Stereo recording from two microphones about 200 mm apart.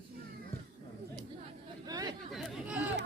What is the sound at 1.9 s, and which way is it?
Chatter, 20° right (ahead or behind).